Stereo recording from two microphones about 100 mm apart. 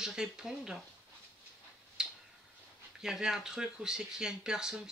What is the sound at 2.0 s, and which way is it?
Tick-tock, 5° right (ahead or behind).